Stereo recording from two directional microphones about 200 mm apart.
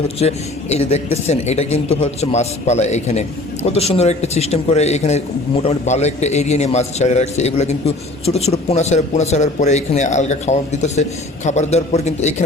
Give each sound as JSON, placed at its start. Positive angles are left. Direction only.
{"t": 0.2, "sound": "a man's voice", "side_deg": 30}